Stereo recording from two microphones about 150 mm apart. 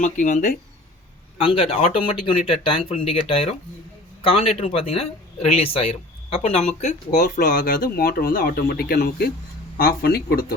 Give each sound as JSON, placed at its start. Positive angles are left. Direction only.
{"t": 0.0, "sound": "speech", "side_deg": 55}
{"t": 1.4, "sound": "speech", "side_deg": 40}
{"t": 7.9, "sound": "speech", "side_deg": 85}